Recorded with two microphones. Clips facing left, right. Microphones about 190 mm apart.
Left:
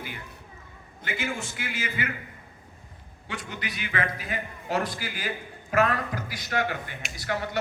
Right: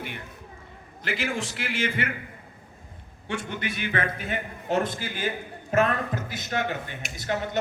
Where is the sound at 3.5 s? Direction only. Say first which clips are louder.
Right 4 dB; 55° right (ahead or behind).